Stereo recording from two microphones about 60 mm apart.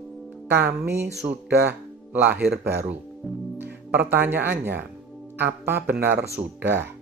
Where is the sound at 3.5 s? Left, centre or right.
Right.